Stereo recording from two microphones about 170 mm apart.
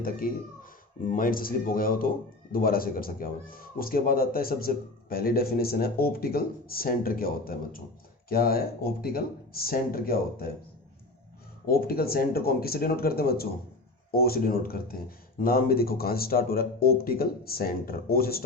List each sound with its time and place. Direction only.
0.0 s speech: 55° left (ahead or behind)
11.6 s speech: 60° left (ahead or behind)